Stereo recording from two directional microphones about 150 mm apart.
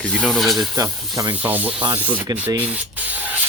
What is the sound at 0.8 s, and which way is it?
Speech, 25° right (ahead or behind).